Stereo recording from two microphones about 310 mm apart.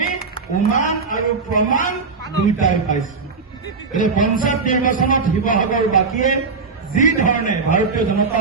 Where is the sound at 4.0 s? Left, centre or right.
Left.